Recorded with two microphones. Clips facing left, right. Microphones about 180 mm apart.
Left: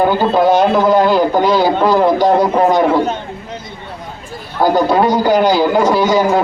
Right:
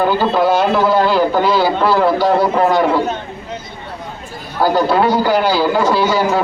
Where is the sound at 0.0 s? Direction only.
15° left (ahead or behind).